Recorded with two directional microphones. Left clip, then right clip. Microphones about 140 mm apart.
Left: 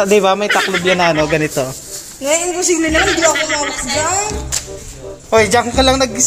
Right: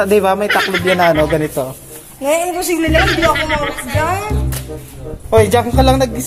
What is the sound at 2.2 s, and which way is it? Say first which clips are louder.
Speech: even; 90° right.